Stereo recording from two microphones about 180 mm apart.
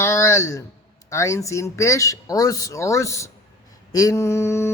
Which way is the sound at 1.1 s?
15° left (ahead or behind).